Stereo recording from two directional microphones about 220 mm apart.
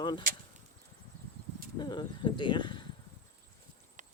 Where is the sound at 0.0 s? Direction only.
20° left (ahead or behind).